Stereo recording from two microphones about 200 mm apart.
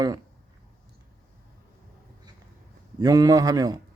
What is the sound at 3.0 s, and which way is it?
Speech, 20° right (ahead or behind).